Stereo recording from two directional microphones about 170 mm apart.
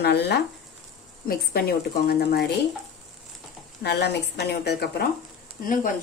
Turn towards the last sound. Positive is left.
turn(degrees=50)  # may be behind; listen again after turning